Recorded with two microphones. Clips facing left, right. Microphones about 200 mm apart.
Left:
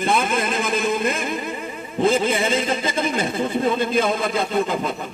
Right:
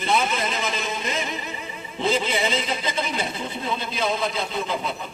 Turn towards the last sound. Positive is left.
turn(degrees=50)  # may be behind; listen again after turning